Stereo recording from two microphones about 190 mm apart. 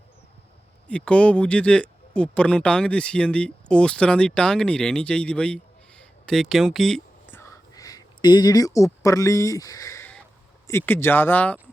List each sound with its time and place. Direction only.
0.9 s speech: 5° left (ahead or behind)
6.0 s a sound: 5° left (ahead or behind)
10.7 s speech: 10° left (ahead or behind)